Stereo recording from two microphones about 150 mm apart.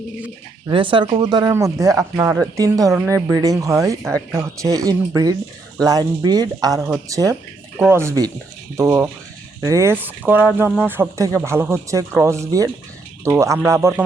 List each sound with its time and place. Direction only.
0.7 s speech: 35° right (ahead or behind); by 14.0 s 15° right (ahead or behind)